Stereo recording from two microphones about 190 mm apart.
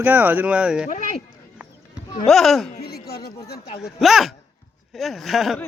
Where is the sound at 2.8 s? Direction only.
55° left (ahead or behind).